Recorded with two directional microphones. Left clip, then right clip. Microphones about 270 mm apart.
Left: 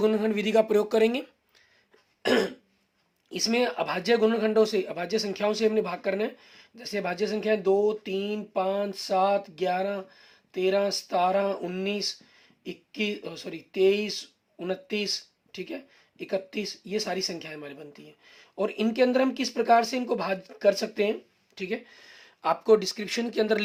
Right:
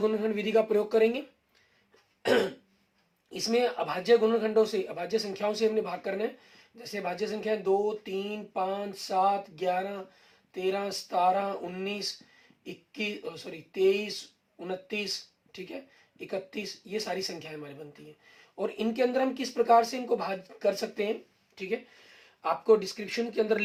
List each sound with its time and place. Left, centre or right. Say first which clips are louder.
0.0 s speech: left 3 dB; left
3.2 s speech: left 1 dB; left